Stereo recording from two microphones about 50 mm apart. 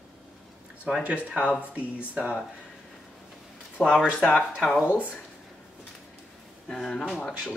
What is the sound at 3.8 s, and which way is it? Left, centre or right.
Speech, centre.